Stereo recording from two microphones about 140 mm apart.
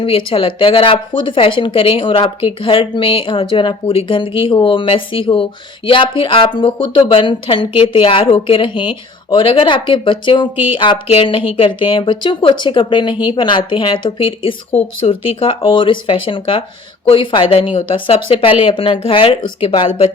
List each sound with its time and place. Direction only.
0.0 s a woman's voice: 40° left (ahead or behind)